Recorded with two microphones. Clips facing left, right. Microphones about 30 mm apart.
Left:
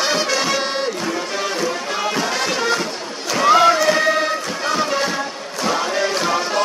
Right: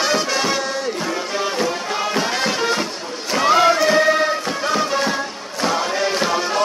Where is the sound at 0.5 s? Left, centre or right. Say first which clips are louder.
Left 1 dB; left.